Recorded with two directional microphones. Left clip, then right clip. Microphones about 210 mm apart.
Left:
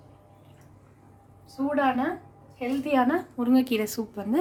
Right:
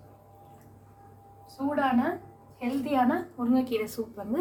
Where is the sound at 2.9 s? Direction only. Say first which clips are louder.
Left 2 dB; 50° left (ahead or behind).